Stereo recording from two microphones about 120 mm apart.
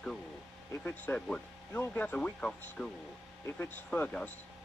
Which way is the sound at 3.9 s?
10° left (ahead or behind).